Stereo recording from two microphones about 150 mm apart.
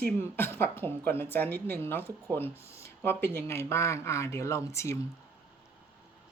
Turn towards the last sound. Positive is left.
turn(degrees=20)  # may be behind; listen again after turning